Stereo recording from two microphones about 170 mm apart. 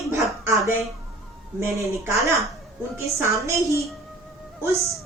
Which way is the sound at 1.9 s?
20° right (ahead or behind).